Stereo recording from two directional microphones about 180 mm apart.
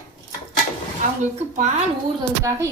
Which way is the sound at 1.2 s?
40° right (ahead or behind).